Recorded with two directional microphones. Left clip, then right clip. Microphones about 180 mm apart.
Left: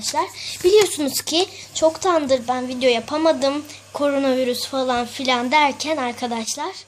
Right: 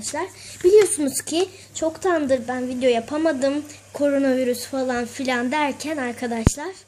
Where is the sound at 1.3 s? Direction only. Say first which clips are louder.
Left 3 dB; 50° left (ahead or behind).